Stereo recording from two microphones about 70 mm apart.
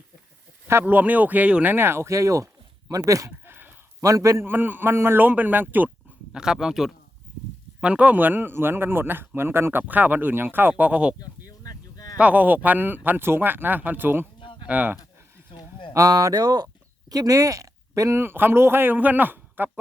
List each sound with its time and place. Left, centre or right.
0.9 s a man's voice: right
1.7 s speech: right
3.4 s a sound: right
4.0 s speech: right
4.4 s a man's voice: right
6.3 s speech: centre
7.8 s a man's voice: centre
11.4 s vehicle: left
12.1 s a man's voice: centre
15.9 s speech: right
17.1 s speech: right
18.2 s a man's voice: right